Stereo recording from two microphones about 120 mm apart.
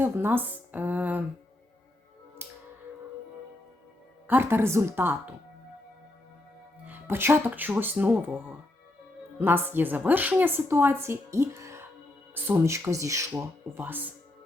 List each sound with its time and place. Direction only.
0.0 s a woman's voice: 20° right (ahead or behind)
2.4 s music: 20° right (ahead or behind)
4.3 s a woman's voice: 15° right (ahead or behind)
6.8 s a woman's voice: 15° right (ahead or behind)
9.4 s a woman's voice: 15° right (ahead or behind)